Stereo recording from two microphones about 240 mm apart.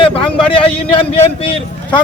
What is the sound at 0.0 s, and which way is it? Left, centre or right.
Vehicle, left.